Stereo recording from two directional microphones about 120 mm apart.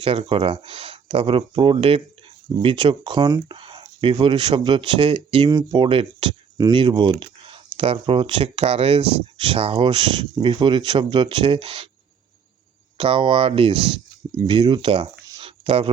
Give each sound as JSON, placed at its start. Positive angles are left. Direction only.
{"t": 0.0, "sound": "speech", "side_deg": -50}
{"t": 3.5, "sound": "speech", "side_deg": -45}
{"t": 13.0, "sound": "speech", "side_deg": -50}
{"t": 15.4, "sound": "a sound", "side_deg": -50}